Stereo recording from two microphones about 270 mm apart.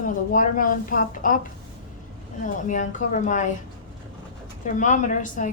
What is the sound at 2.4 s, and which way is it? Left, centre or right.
A woman's voice, left.